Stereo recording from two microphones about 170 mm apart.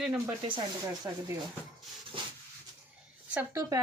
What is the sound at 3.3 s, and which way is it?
Speech, 15° right (ahead or behind).